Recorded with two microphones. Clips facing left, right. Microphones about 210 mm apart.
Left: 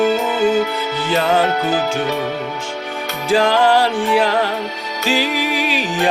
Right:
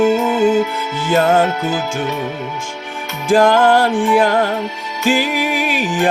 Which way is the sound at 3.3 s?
50° right (ahead or behind).